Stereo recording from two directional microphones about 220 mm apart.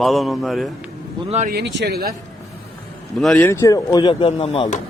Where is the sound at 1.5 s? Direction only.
50° right (ahead or behind).